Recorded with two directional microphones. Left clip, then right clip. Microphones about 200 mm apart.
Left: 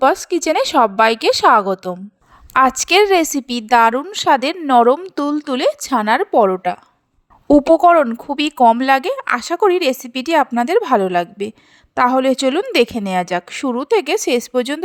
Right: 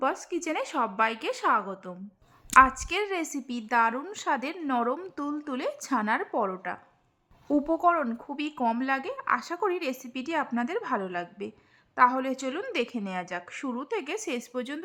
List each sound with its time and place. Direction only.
0.0 s speech: 40° left (ahead or behind)